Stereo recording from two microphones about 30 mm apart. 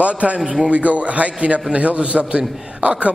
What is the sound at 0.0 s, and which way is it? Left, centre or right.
A man's voice, right.